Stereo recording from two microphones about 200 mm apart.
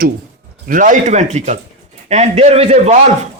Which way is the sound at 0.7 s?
40° right (ahead or behind).